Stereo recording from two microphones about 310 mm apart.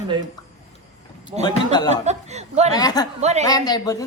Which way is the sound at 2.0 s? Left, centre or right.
Right.